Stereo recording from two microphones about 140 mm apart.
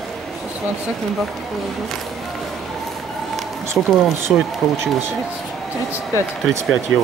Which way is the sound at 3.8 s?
5° right (ahead or behind).